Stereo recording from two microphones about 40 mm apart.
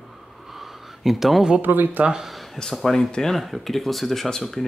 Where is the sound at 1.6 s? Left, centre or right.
Right.